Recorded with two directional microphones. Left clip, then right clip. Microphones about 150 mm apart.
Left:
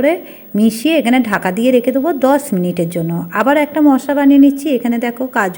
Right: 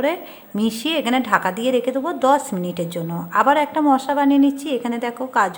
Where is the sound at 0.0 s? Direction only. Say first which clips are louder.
Left 7 dB; 10° left (ahead or behind).